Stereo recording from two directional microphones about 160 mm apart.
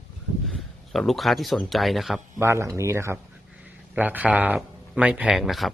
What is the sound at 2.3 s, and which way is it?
Speech, 15° right (ahead or behind).